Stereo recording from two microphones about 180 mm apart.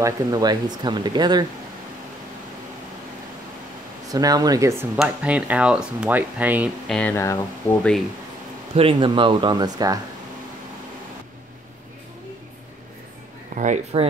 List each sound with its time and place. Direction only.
0.0 s speech: 20° right (ahead or behind)
4.1 s speech: 20° right (ahead or behind)
6.9 s speech: 10° left (ahead or behind)
8.7 s speech: 30° right (ahead or behind)
13.6 s speech: 45° right (ahead or behind)